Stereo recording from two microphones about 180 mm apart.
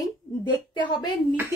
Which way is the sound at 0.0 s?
25° left (ahead or behind).